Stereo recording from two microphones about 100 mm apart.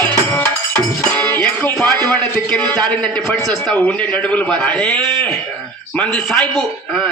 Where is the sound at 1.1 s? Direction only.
15° left (ahead or behind).